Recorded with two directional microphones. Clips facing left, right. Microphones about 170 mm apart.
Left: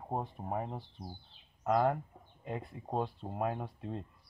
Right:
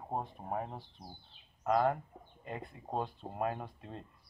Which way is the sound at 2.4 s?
5° left (ahead or behind).